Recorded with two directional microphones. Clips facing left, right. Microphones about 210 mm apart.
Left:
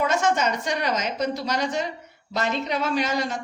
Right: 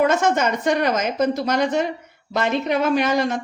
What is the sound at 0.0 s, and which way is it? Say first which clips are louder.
A woman's voice: right 4 dB; 55° right (ahead or behind).